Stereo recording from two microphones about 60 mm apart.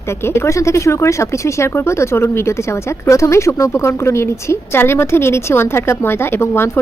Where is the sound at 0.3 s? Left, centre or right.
Left.